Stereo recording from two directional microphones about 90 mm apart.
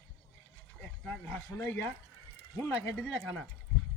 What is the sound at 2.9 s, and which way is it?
Speech, 10° left (ahead or behind).